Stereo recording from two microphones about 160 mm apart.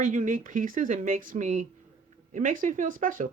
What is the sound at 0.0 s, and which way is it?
Speech, 55° right (ahead or behind).